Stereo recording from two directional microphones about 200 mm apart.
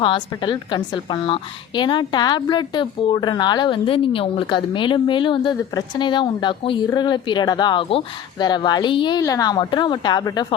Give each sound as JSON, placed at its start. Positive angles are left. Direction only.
{"t": 0.0, "sound": "a woman's voice", "side_deg": 25}